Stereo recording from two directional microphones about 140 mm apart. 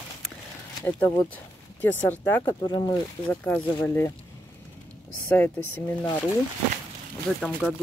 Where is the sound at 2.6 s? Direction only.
30° left (ahead or behind).